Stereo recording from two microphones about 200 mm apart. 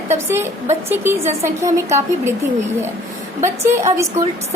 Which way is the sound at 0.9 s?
10° right (ahead or behind).